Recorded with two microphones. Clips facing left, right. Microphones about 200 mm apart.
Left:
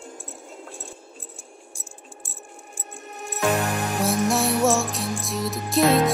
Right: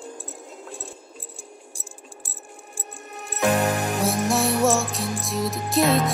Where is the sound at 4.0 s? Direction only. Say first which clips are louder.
Left 2 dB; centre (ahead or behind).